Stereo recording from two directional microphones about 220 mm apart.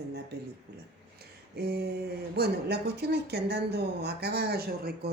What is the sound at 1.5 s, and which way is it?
Speech, 45° right (ahead or behind).